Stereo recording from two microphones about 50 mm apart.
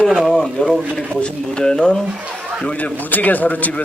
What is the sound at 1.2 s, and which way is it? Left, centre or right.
Speech, centre.